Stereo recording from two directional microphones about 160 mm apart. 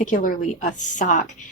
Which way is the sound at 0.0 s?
55° left (ahead or behind).